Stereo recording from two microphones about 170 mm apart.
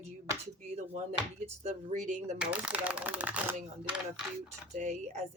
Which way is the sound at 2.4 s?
5° right (ahead or behind).